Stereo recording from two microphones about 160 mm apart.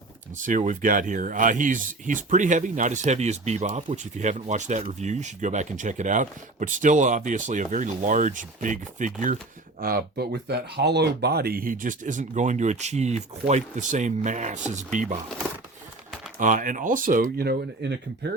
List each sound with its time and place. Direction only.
0.4 s speech: 55° right (ahead or behind)
9.8 s speech: 80° right; by 15.2 s 50° right (ahead or behind)
16.4 s speech: 55° right (ahead or behind); by 18.3 s 85° right